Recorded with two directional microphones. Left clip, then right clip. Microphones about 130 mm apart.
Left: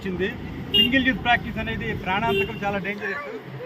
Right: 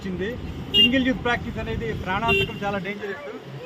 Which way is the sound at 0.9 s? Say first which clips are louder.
Left 2 dB; 30° right (ahead or behind).